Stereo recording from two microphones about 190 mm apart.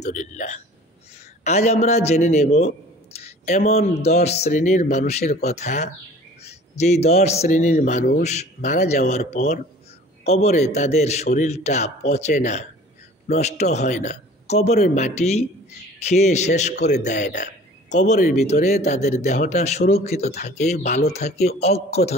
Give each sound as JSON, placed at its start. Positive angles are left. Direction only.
{"t": 0.0, "sound": "speech", "side_deg": 40}
{"t": 3.2, "sound": "a sound", "side_deg": 35}
{"t": 4.0, "sound": "speech", "side_deg": 35}
{"t": 16.7, "sound": "a man's voice", "side_deg": 60}
{"t": 17.0, "sound": "speech", "side_deg": 40}